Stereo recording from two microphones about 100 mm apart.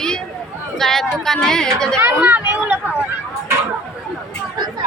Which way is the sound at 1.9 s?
20° right (ahead or behind).